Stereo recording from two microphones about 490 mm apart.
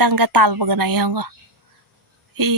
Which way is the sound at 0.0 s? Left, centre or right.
Right.